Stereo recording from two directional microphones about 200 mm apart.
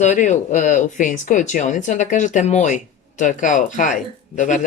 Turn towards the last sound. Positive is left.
turn(degrees=40)  # may be behind; listen again after turning